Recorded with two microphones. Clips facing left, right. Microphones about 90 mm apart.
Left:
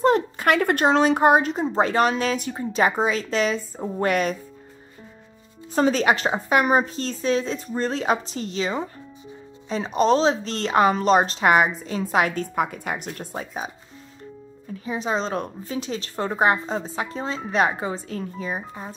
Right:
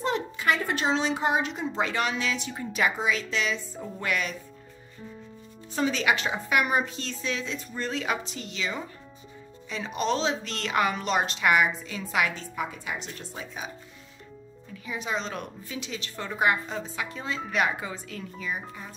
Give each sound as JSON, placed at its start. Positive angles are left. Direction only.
{"t": 0.0, "sound": "a sound", "side_deg": 45}
{"t": 0.5, "sound": "speech", "side_deg": 60}
{"t": 2.5, "sound": "a woman's voice", "side_deg": 30}
{"t": 5.8, "sound": "a woman's voice", "side_deg": 40}
{"t": 14.7, "sound": "a woman's voice", "side_deg": 35}